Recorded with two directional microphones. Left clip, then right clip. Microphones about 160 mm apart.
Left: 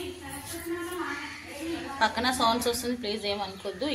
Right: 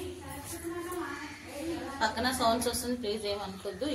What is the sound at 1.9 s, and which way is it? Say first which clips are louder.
A woman's voice: left 5 dB; 20° left (ahead or behind).